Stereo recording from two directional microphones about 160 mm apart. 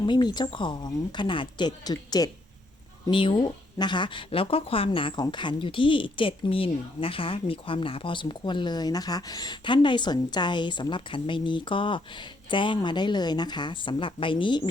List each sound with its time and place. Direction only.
0.0 s speech: 25° left (ahead or behind)